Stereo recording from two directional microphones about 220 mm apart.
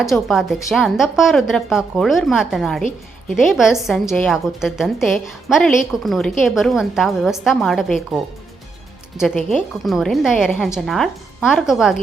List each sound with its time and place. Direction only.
0.0 s a woman's voice: centre (ahead or behind)
9.2 s a woman's voice: centre (ahead or behind)